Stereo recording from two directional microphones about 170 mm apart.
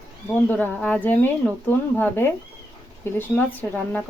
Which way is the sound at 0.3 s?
10° left (ahead or behind).